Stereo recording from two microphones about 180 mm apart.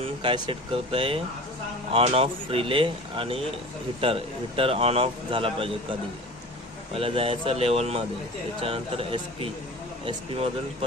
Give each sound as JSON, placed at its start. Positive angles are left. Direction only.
{"t": 0.2, "sound": "speech", "side_deg": -25}